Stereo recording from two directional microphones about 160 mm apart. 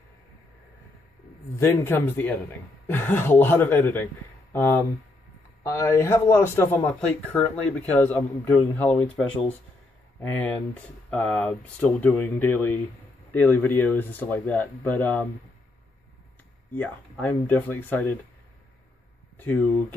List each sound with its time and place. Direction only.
1.6 s speech: 15° left (ahead or behind)
10.3 s speech: 10° left (ahead or behind)
16.7 s speech: 10° left (ahead or behind)
19.3 s speech: 10° left (ahead or behind)